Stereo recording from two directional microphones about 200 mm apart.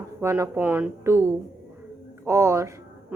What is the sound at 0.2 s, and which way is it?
A woman's voice, 15° right (ahead or behind).